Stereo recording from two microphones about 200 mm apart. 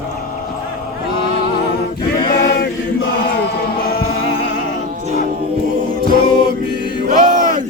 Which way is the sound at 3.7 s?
50° left (ahead or behind).